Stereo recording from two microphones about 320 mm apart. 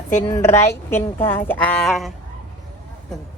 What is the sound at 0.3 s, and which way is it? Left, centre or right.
Speech, centre.